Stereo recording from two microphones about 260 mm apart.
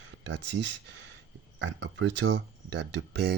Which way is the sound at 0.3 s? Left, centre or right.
Right.